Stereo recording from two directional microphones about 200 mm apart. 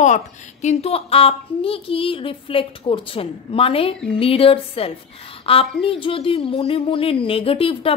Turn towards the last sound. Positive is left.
turn(degrees=30)  # may be behind; listen again after turning